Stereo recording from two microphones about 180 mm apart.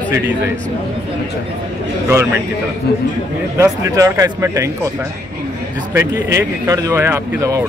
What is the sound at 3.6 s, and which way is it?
Speech, 15° right (ahead or behind).